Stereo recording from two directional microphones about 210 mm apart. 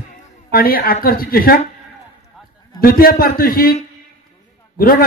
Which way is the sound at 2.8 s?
45° left (ahead or behind).